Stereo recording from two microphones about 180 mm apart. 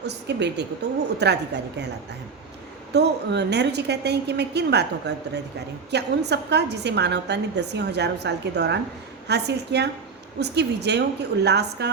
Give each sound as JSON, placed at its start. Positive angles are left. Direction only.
{"t": 0.0, "sound": "a woman's voice", "side_deg": -70}
{"t": 2.9, "sound": "a woman's voice", "side_deg": -70}